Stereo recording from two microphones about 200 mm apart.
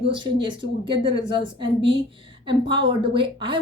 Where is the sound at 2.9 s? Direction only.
25° right (ahead or behind).